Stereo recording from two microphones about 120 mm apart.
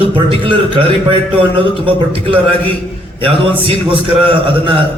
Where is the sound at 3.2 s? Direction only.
50° right (ahead or behind).